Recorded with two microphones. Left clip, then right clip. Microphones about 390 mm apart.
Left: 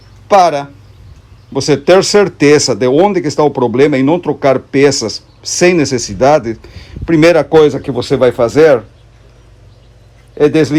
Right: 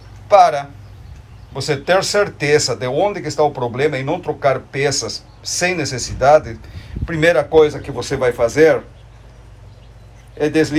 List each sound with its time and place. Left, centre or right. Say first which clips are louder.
0.3 s speech: left 3 dB; centre
10.3 s speech: left 7 dB; centre